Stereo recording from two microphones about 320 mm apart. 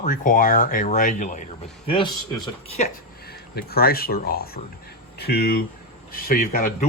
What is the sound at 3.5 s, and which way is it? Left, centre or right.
Speech, left.